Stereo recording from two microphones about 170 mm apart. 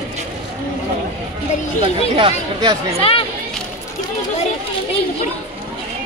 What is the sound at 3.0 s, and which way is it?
Speech, 35° left (ahead or behind).